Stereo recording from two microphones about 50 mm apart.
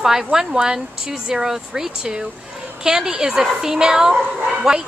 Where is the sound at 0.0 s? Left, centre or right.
Centre.